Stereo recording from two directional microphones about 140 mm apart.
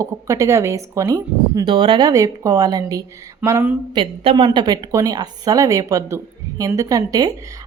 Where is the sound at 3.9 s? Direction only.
40° right (ahead or behind).